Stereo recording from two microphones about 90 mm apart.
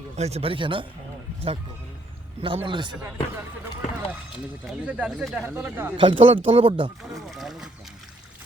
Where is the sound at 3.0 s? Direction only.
25° right (ahead or behind).